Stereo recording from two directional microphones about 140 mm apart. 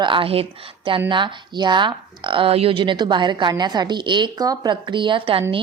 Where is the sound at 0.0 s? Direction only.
40° right (ahead or behind).